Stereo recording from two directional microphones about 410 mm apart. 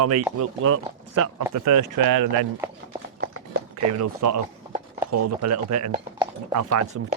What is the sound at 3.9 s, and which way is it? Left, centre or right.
Speech, right.